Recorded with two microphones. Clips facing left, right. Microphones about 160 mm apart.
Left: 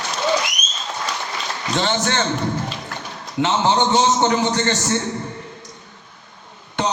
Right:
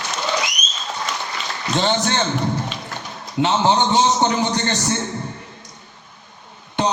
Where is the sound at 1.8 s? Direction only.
20° right (ahead or behind).